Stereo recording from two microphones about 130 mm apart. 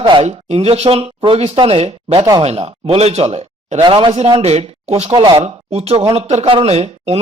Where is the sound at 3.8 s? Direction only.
40° right (ahead or behind).